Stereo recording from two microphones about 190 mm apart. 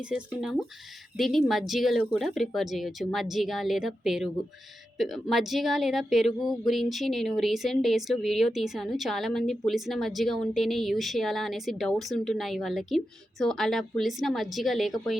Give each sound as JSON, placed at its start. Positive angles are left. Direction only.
{"t": 0.0, "sound": "a woman's voice", "side_deg": -5}